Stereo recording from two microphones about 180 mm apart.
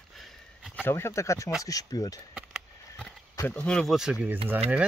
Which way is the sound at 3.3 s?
10° left (ahead or behind).